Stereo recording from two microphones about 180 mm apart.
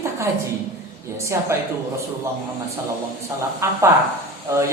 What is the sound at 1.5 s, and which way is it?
Speech, 15° right (ahead or behind).